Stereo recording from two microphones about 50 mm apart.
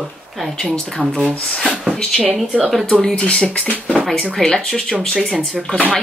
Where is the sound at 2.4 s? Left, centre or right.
Right.